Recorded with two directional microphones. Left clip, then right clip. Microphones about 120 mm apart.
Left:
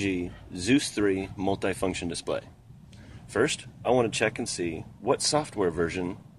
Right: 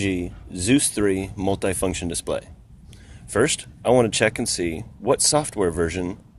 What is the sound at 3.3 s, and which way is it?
Speech, 55° right (ahead or behind).